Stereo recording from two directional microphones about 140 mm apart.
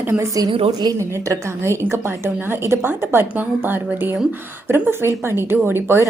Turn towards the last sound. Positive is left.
turn(degrees=-15)  # may be behind; listen again after turning